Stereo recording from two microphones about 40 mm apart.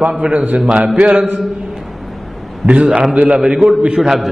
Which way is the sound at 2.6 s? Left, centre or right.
Centre.